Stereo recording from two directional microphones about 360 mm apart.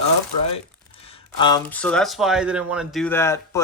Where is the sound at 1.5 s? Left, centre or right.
Centre.